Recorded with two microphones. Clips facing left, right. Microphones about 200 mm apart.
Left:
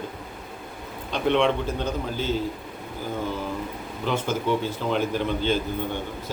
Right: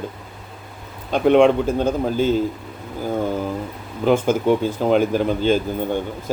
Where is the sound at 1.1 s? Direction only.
50° right (ahead or behind).